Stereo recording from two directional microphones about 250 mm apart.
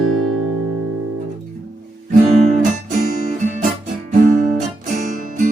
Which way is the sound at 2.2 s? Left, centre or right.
Right.